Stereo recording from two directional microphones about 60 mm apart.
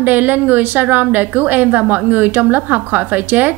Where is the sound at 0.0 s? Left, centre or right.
Right.